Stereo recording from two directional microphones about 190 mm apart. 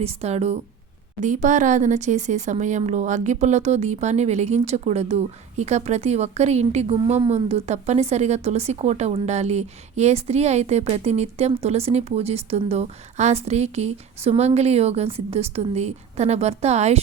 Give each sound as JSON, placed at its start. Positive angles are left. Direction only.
{"t": 0.0, "sound": "speech", "side_deg": -35}